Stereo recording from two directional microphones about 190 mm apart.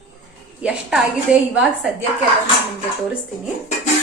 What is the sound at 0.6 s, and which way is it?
A woman's voice, 5° right (ahead or behind).